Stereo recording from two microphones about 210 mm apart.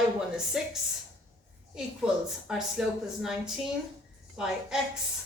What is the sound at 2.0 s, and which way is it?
Speech, centre (ahead or behind).